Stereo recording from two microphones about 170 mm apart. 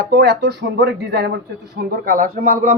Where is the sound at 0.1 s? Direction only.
80° right.